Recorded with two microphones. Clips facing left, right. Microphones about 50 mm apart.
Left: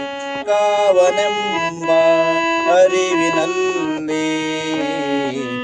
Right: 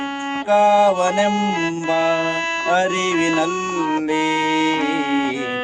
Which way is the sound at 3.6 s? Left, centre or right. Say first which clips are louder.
Left 4 dB; left.